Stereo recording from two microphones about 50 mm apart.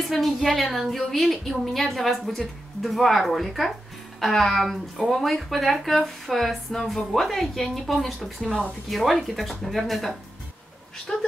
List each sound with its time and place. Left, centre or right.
0.1 s speech: centre